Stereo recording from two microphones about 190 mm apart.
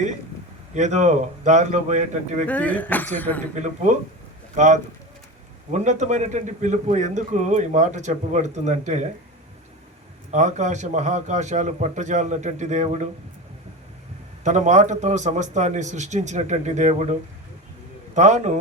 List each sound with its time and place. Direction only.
0.7 s speech: 40° right (ahead or behind)
2.5 s speech: 10° left (ahead or behind)
3.5 s speech: 40° right (ahead or behind)
10.3 s speech: 40° right (ahead or behind)
14.4 s a man's voice: 40° right (ahead or behind)